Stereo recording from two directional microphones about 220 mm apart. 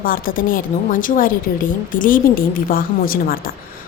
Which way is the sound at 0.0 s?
40° left (ahead or behind).